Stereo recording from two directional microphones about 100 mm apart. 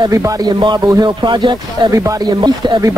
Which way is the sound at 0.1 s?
30° right (ahead or behind).